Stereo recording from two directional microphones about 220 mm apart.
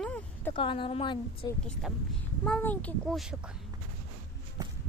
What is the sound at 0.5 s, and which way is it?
Speech, 25° left (ahead or behind).